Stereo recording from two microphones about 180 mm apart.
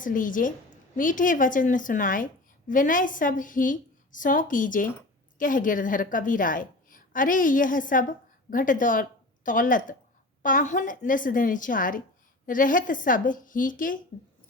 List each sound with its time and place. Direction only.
0.0 s a woman's voice: 50° left (ahead or behind)